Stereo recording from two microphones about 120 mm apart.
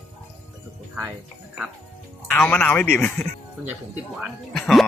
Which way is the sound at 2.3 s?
15° left (ahead or behind).